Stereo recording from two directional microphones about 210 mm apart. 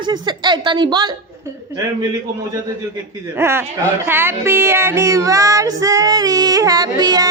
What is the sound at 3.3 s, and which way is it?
Speech, 10° right (ahead or behind).